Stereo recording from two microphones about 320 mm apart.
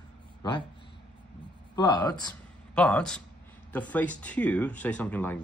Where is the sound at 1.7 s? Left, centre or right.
Centre.